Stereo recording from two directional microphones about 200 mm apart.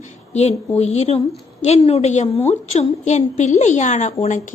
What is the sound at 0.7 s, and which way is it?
Speech, 30° left (ahead or behind).